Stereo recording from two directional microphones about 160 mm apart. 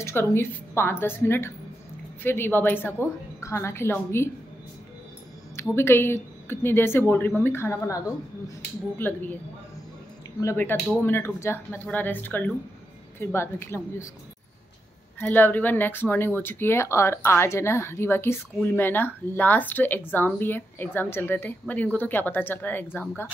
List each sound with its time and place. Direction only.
0.0 s speech: 15° left (ahead or behind)
5.8 s speech: 15° left (ahead or behind)
10.4 s speech: 15° left (ahead or behind)
15.1 s speech: 10° left (ahead or behind)